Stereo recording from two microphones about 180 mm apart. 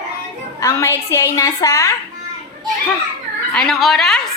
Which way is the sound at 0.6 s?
15° left (ahead or behind).